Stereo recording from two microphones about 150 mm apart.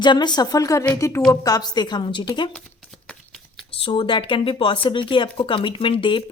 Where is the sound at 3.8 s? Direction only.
35° left (ahead or behind).